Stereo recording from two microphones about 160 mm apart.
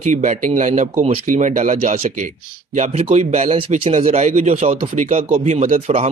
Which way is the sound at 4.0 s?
45° right (ahead or behind).